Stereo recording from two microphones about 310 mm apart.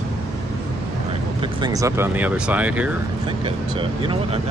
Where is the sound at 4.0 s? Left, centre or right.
Centre.